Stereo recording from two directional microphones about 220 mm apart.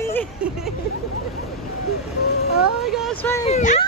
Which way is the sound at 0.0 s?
10° left (ahead or behind).